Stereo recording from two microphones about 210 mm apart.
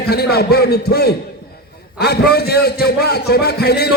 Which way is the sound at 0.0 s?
50° left (ahead or behind).